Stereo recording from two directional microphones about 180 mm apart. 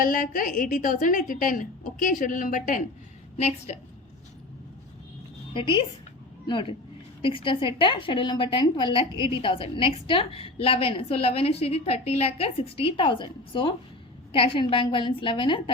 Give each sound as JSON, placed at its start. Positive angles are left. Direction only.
{"t": 0.0, "sound": "a woman's voice", "side_deg": 50}
{"t": 5.5, "sound": "a woman's voice", "side_deg": 30}